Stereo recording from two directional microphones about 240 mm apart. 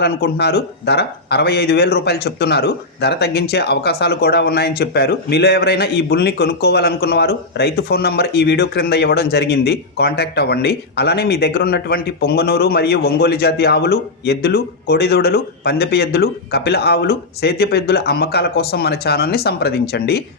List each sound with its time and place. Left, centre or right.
0.0 s speech: left